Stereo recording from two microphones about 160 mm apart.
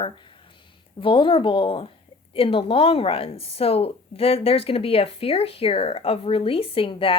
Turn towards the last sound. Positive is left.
turn(degrees=35)  # may be behind; listen again after turning